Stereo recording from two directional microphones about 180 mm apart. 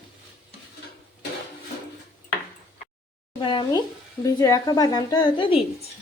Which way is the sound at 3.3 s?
25° left (ahead or behind).